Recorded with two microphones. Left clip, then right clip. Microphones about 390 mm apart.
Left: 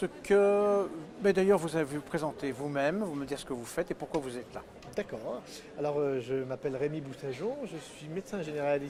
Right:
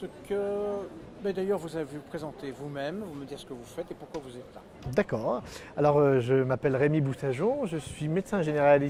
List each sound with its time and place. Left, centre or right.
0.0 s a man's voice: left
4.9 s a man's voice: right